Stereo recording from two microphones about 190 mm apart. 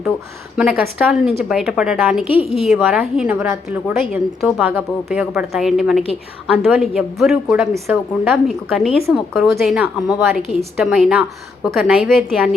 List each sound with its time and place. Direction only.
0.5 s a woman's voice: 5° right (ahead or behind)